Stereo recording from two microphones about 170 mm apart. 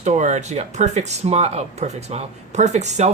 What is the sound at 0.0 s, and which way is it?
Speech, 45° right (ahead or behind).